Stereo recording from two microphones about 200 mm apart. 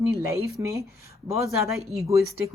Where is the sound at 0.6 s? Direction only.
15° right (ahead or behind).